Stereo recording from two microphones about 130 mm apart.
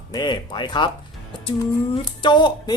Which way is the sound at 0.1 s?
35° left (ahead or behind).